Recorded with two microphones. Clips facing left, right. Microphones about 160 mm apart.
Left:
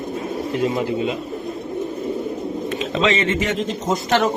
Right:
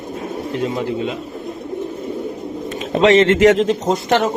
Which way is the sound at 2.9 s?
60° right (ahead or behind).